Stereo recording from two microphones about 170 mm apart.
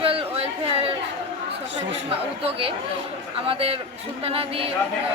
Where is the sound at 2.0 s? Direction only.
35° right (ahead or behind).